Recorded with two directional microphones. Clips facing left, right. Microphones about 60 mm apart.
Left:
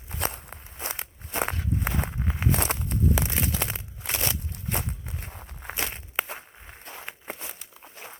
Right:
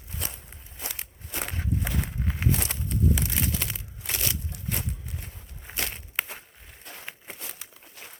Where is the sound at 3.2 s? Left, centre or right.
Left.